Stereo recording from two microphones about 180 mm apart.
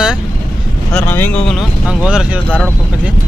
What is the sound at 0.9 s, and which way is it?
Speech, 10° left (ahead or behind).